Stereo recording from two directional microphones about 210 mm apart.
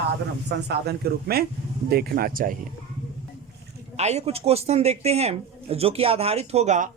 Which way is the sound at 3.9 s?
30° right (ahead or behind).